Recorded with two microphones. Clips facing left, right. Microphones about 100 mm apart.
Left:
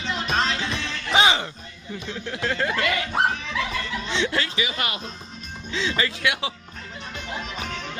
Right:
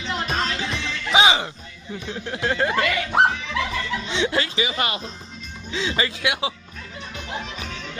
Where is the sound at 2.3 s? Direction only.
30° right (ahead or behind).